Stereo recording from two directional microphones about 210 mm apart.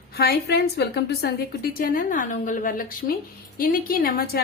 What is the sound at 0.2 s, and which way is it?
A woman's voice, 50° left (ahead or behind).